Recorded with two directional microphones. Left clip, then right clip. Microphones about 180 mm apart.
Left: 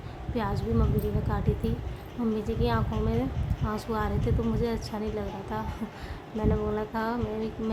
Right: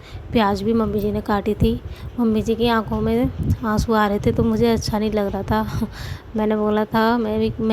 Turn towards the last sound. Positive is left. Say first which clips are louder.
# right 11 dB
turn(degrees=-45)  # may be behind; listen again after turning